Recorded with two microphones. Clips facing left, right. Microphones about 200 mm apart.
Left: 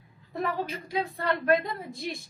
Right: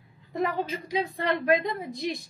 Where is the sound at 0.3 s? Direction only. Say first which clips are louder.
Right 3 dB; 15° right (ahead or behind).